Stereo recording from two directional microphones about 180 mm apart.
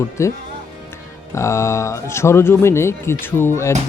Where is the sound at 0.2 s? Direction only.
15° left (ahead or behind).